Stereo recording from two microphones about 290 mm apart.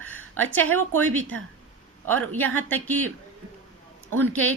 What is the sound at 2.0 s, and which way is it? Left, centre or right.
Speech, right.